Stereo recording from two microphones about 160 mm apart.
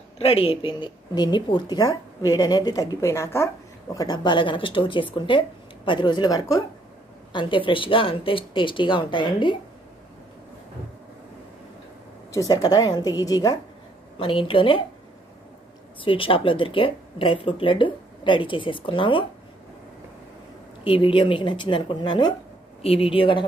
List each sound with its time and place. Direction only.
0.2 s speech: 35° left (ahead or behind)
12.3 s speech: 20° left (ahead or behind)
14.1 s speech: 35° left (ahead or behind)
16.0 s speech: 35° left (ahead or behind)
20.8 s speech: 30° left (ahead or behind)
22.8 s speech: 40° left (ahead or behind)